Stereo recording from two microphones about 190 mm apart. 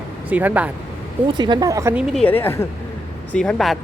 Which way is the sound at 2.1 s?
10° left (ahead or behind).